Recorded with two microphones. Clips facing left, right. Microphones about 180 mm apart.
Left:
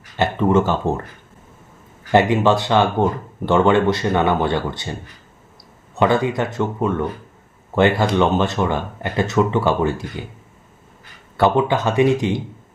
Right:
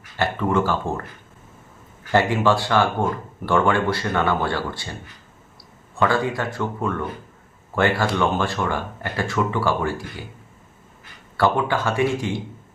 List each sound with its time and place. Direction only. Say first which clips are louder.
0.2 s speech: left 4 dB; 20° left (ahead or behind)
2.1 s speech: left 4 dB; 20° left (ahead or behind)
6.0 s speech: left 4 dB; 20° left (ahead or behind)
11.3 s speech: left 4 dB; 20° left (ahead or behind)